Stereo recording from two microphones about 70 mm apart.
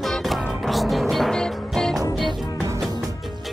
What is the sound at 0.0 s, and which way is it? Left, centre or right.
Music, centre.